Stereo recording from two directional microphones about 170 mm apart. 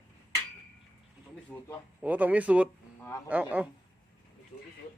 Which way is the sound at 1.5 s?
10° left (ahead or behind).